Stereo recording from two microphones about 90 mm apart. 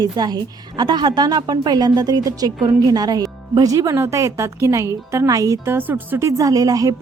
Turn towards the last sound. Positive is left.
turn(degrees=-40)  # may be behind; listen again after turning